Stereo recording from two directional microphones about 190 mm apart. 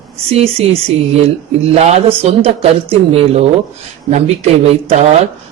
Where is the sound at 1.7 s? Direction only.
35° right (ahead or behind).